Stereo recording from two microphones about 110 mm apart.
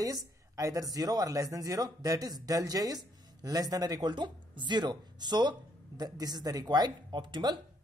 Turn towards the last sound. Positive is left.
turn(degrees=-40)  # may be behind; listen again after turning